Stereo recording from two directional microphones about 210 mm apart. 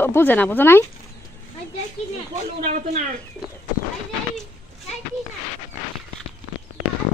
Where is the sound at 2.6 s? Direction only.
35° right (ahead or behind).